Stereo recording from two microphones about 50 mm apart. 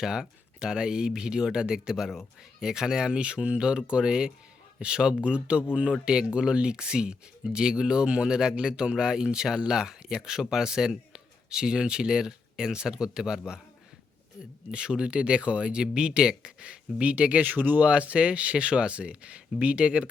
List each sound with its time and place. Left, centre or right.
0.0 s speech: centre
14.7 s speech: centre